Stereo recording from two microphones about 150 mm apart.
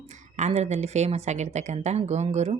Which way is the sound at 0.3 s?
50° right (ahead or behind).